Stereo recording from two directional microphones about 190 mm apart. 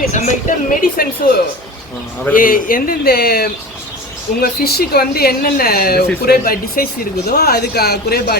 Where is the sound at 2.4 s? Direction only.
45° left (ahead or behind).